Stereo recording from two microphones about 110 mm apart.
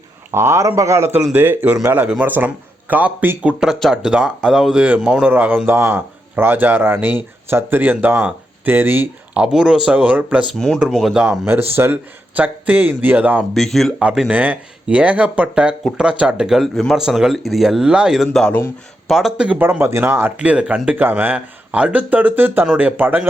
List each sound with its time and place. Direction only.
0.3 s speech: 25° right (ahead or behind)
1.2 s a man's voice: 15° right (ahead or behind)
3.6 s a man's voice: centre (ahead or behind)
10.5 s a man's voice: 5° left (ahead or behind)
11.4 s a man's voice: 20° right (ahead or behind)
13.5 s speech: centre (ahead or behind)
14.0 s a man's voice: 10° right (ahead or behind)
19.5 s a man's voice: 20° right (ahead or behind)